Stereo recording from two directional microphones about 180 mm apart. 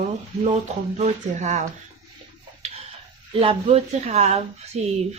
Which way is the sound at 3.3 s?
30° right (ahead or behind).